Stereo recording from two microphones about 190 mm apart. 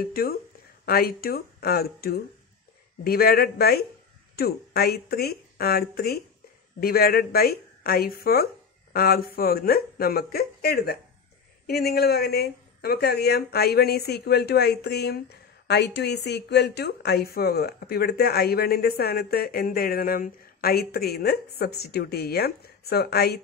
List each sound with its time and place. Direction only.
0.0 s a woman's voice: 50° left (ahead or behind)